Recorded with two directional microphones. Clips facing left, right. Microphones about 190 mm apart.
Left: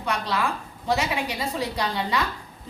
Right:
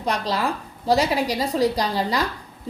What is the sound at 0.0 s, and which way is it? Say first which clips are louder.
A woman's voice: right 3 dB; 35° right (ahead or behind).